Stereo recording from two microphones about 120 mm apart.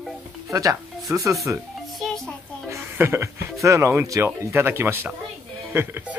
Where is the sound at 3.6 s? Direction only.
25° right (ahead or behind).